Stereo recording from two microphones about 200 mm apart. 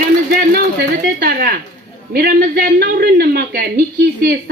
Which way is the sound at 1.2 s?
50° right (ahead or behind).